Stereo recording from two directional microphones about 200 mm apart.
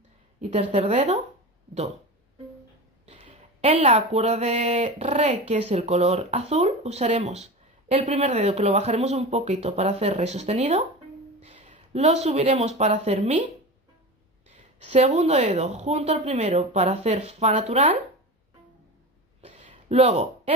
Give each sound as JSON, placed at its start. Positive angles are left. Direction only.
{"t": 0.4, "sound": "speech", "side_deg": -35}
{"t": 3.1, "sound": "speech", "side_deg": -35}
{"t": 14.5, "sound": "speech", "side_deg": -35}
{"t": 19.4, "sound": "a sound", "side_deg": -30}